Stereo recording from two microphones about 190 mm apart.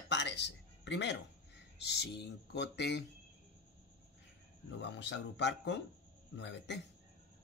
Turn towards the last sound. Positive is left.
turn(degrees=65)  # may be behind; listen again after turning